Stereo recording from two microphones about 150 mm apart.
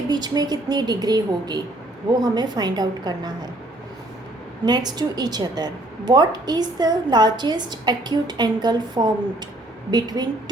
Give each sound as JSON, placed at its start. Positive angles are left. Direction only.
{"t": 0.1, "sound": "a woman's voice", "side_deg": -25}
{"t": 4.6, "sound": "a woman's voice", "side_deg": -25}